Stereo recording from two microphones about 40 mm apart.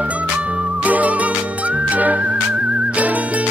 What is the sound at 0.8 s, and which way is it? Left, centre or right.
Music, right.